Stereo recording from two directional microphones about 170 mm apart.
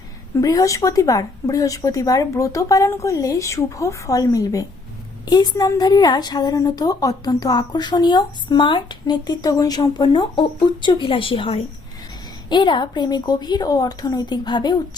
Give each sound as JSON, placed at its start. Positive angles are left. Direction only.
{"t": 0.4, "sound": "a woman's voice", "side_deg": 20}